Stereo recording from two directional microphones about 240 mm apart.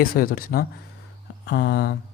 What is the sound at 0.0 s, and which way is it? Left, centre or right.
Speech, left.